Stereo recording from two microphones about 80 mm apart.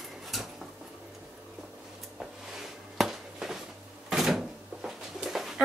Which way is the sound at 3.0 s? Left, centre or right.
Centre.